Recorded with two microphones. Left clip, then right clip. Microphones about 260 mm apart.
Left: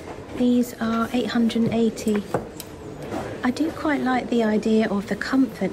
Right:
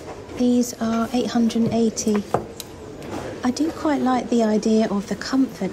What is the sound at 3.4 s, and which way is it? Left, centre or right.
Speech, centre.